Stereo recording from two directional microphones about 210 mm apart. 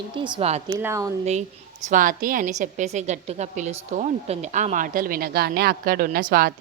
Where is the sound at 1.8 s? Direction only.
40° right (ahead or behind).